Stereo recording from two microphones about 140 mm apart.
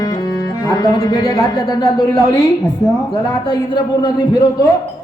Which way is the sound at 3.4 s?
30° left (ahead or behind).